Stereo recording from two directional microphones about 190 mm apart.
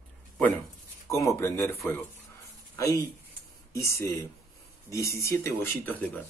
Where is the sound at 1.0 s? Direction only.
15° left (ahead or behind).